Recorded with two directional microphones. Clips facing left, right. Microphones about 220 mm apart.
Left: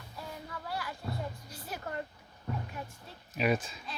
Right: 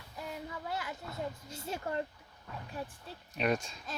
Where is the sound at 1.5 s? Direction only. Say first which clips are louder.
Right 3 dB; 25° right (ahead or behind).